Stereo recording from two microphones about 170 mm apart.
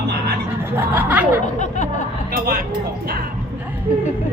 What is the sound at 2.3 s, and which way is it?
Speech, 55° right (ahead or behind).